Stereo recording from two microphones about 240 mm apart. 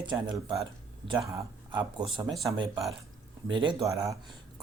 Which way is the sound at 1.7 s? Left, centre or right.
Centre.